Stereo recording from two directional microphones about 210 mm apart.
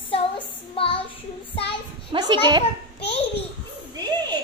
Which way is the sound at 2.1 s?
20° right (ahead or behind).